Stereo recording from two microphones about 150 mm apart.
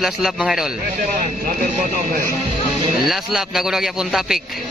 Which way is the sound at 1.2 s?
65° right (ahead or behind).